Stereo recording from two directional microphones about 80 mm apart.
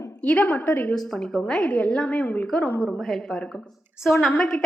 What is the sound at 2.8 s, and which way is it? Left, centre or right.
A woman's voice, centre.